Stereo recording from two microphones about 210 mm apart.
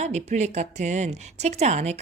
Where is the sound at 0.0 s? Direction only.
35° right (ahead or behind).